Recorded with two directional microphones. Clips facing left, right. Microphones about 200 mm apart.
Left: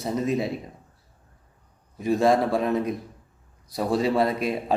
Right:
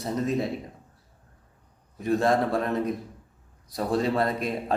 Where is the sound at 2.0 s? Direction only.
5° left (ahead or behind).